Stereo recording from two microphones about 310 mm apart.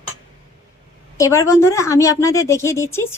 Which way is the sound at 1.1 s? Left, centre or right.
Centre.